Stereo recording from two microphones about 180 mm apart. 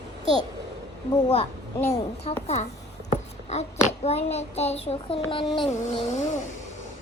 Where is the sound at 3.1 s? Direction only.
40° left (ahead or behind).